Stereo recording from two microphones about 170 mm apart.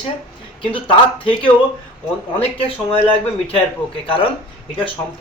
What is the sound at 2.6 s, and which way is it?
Speech, 35° left (ahead or behind).